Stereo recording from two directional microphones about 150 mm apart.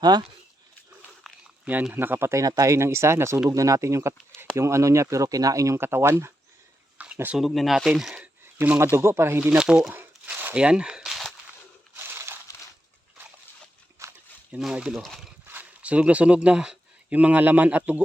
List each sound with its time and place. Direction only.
0.0 s speech: 30° right (ahead or behind)
1.6 s speech: 10° right (ahead or behind)
11.9 s crumpling: 15° right (ahead or behind)
14.0 s a sound: 15° right (ahead or behind)
14.6 s speech: 5° right (ahead or behind)
15.4 s speech: 10° right (ahead or behind)